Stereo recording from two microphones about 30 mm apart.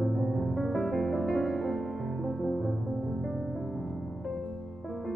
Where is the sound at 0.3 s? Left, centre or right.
Centre.